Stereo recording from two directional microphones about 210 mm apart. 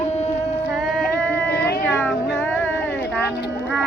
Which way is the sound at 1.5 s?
50° left (ahead or behind).